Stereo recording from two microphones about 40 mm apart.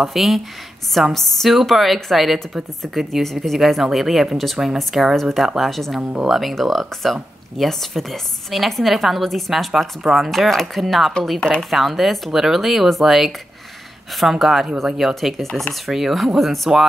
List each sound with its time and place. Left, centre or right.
0.0 s a woman's voice: centre
11.3 s speech: left
11.7 s a woman's voice: centre